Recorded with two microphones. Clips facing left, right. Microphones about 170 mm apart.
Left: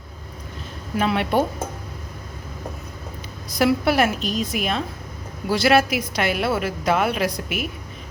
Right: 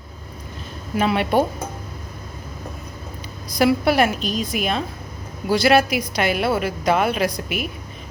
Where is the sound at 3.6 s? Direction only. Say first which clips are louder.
Right 2 dB; centre (ahead or behind).